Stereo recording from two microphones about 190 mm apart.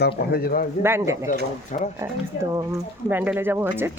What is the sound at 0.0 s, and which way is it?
Speech, 55° left (ahead or behind).